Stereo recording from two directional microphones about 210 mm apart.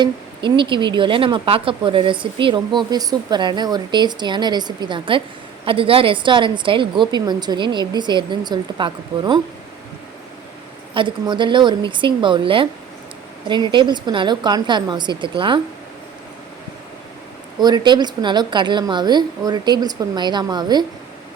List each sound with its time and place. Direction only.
0.0 s speech: 25° right (ahead or behind)
10.9 s speech: 25° right (ahead or behind)
17.6 s speech: 20° right (ahead or behind)